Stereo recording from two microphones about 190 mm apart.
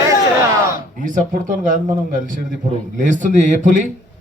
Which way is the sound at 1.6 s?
45° right (ahead or behind).